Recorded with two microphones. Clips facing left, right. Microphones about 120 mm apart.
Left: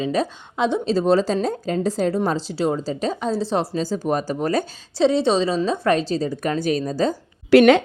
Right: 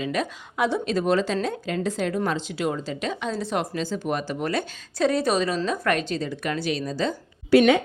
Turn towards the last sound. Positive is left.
turn(degrees=85)